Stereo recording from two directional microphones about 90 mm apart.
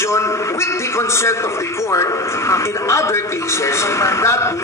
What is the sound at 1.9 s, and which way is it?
A man's voice, 30° left (ahead or behind).